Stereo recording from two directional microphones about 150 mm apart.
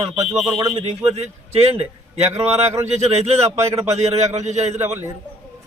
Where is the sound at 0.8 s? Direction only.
45° right (ahead or behind).